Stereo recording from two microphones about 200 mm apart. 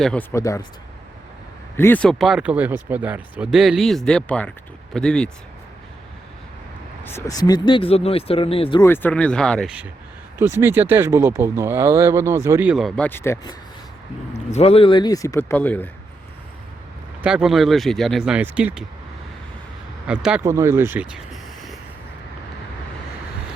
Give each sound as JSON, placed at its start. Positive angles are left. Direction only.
{"t": 0.0, "sound": "speech", "side_deg": 5}
{"t": 1.7, "sound": "speech", "side_deg": 10}
{"t": 7.0, "sound": "speech", "side_deg": 10}
{"t": 8.8, "sound": "speech", "side_deg": 10}
{"t": 10.3, "sound": "speech", "side_deg": -10}
{"t": 13.1, "sound": "speech", "side_deg": 10}
{"t": 14.5, "sound": "speech", "side_deg": 30}
{"t": 17.2, "sound": "speech", "side_deg": 0}
{"t": 20.1, "sound": "speech", "side_deg": -5}